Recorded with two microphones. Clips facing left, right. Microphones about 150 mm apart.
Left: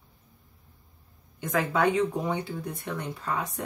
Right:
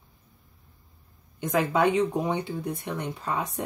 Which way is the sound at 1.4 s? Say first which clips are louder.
Right 2 dB; 20° right (ahead or behind).